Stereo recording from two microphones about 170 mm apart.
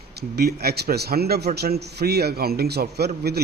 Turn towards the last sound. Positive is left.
turn(degrees=-70)  # may be behind; listen again after turning